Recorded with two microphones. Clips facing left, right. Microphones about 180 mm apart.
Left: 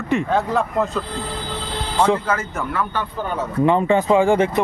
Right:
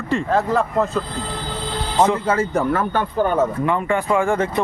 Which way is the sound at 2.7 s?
50° right (ahead or behind).